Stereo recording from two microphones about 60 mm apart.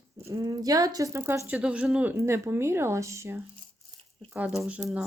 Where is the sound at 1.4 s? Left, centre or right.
Centre.